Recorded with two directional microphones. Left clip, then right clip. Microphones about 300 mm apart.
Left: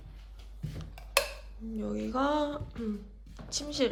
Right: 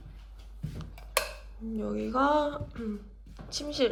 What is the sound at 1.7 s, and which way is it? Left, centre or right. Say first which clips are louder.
Speech: right 3 dB; centre.